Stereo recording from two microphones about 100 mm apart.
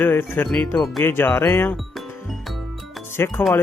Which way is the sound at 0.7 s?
Centre (ahead or behind).